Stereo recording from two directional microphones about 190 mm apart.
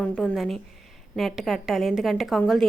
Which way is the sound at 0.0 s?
5° left (ahead or behind).